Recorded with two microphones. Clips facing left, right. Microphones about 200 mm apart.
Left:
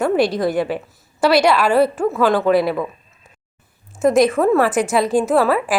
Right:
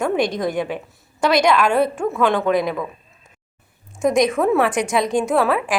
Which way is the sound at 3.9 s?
5° left (ahead or behind).